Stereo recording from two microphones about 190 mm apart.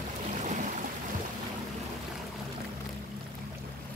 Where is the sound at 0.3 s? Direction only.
40° right (ahead or behind).